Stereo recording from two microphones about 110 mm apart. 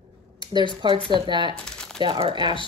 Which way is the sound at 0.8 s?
45° right (ahead or behind).